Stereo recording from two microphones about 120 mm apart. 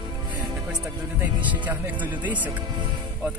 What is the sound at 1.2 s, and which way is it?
Speech, 15° right (ahead or behind).